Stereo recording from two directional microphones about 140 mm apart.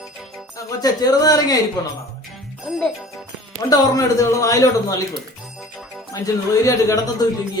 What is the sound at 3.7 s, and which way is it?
A woman's voice, 25° left (ahead or behind).